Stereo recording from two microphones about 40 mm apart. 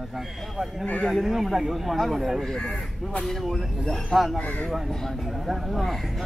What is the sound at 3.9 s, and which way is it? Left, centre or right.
Speech, centre.